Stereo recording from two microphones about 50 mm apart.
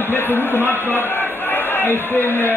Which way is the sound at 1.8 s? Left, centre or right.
Left.